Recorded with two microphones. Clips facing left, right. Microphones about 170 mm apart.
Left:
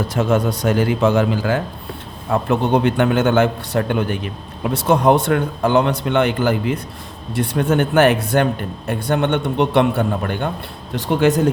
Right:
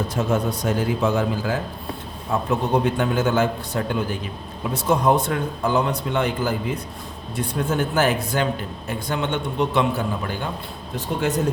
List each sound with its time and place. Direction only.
0.2 s a man's voice: 75° left (ahead or behind)
10.9 s speech: 85° left